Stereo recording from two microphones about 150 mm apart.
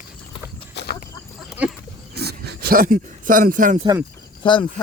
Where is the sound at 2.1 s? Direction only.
90° right; by 3.8 s 60° right (ahead or behind).